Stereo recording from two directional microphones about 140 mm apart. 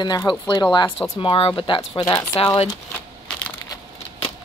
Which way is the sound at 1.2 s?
40° left (ahead or behind).